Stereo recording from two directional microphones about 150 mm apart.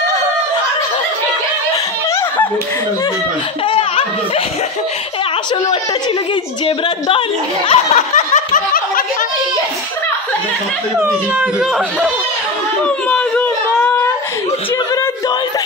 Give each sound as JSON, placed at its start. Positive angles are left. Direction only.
{"t": 3.6, "sound": "laughter", "side_deg": 35}
{"t": 6.6, "sound": "speech", "side_deg": 35}
{"t": 11.0, "sound": "speech", "side_deg": -10}
{"t": 13.1, "sound": "a sound", "side_deg": 10}